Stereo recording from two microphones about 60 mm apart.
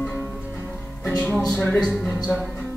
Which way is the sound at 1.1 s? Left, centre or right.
Centre.